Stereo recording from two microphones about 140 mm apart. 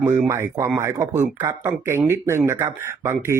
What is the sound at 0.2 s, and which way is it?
Speech, 20° right (ahead or behind).